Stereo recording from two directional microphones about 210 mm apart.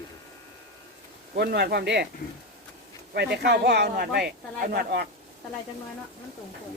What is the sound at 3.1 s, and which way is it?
Speech, 50° right (ahead or behind).